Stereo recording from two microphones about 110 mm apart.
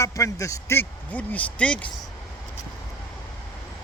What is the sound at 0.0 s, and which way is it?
A man's voice, 30° left (ahead or behind).